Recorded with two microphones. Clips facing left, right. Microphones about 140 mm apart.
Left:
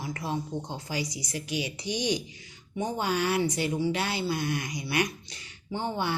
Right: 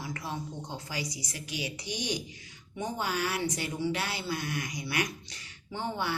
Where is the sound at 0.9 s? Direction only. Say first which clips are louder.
Left 7 dB; 25° left (ahead or behind).